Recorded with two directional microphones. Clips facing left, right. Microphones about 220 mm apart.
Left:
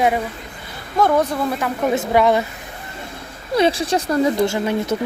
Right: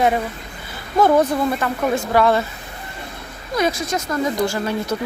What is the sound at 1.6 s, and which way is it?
Speech, 20° left (ahead or behind).